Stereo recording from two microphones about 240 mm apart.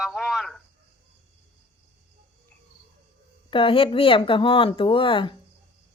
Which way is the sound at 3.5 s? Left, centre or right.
Left.